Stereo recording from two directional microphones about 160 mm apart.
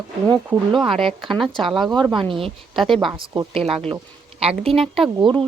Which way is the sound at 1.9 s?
25° right (ahead or behind).